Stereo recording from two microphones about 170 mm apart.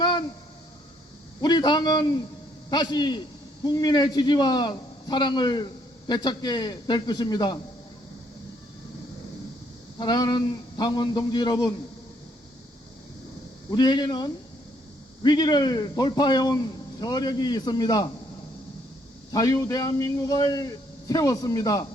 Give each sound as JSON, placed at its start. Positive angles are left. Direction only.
{"t": 0.0, "sound": "a sound", "side_deg": 25}
{"t": 1.4, "sound": "a man's voice", "side_deg": 25}
{"t": 10.0, "sound": "a man's voice", "side_deg": 25}
{"t": 13.7, "sound": "a man's voice", "side_deg": 25}
{"t": 19.3, "sound": "a man's voice", "side_deg": 20}